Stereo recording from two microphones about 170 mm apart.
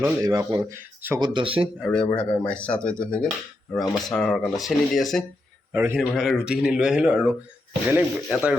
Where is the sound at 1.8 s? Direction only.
5° left (ahead or behind).